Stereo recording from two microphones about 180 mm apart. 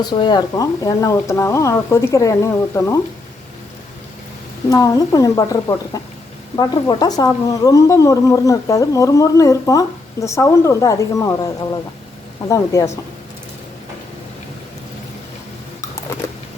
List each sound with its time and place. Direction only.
0.0 s a woman's voice: 25° left (ahead or behind)
4.7 s a woman's voice: 20° left (ahead or behind)